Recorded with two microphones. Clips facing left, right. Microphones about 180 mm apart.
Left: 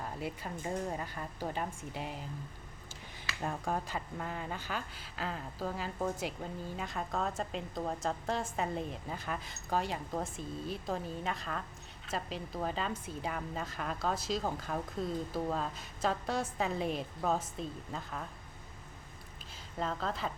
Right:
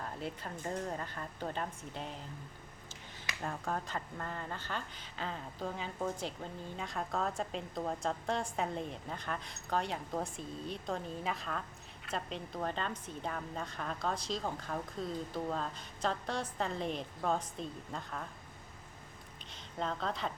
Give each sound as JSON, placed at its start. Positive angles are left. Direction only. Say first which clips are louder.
{"t": 0.0, "sound": "a woman's voice", "louder": "left 2 dB", "side_deg": 5}
{"t": 3.4, "sound": "speech", "louder": "left 2 dB", "side_deg": 15}
{"t": 19.7, "sound": "speech", "louder": "left 1 dB", "side_deg": 0}